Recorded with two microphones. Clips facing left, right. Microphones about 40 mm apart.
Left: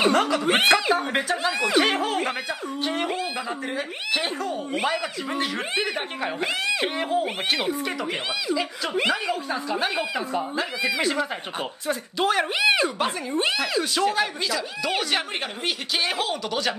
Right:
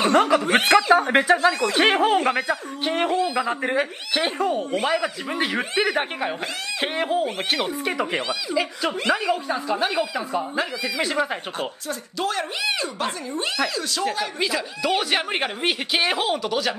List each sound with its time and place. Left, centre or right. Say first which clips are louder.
0.1 s speech: right 4 dB; centre
0.5 s speech: right 2 dB; centre
1.0 s speech: right 6 dB; centre
1.4 s speech: right 3 dB; centre
1.8 s speech: right 4 dB; right
2.1 s speech: right 6 dB; centre
2.8 s speech: right 4 dB; right
4.1 s speech: right 3 dB; centre
6.8 s speech: right 1 dB; centre
11.9 s a woman's voice: left 5 dB; centre
14.4 s speech: right 3 dB; centre
16.4 s speech: right 2 dB; centre